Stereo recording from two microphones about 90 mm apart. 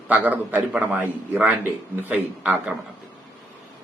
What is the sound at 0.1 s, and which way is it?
A man's voice, 20° right (ahead or behind).